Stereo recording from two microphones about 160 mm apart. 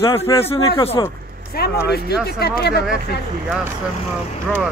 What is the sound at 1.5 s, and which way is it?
Speech, 80° left.